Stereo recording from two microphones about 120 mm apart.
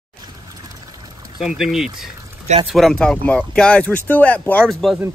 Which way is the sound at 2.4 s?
65° right (ahead or behind).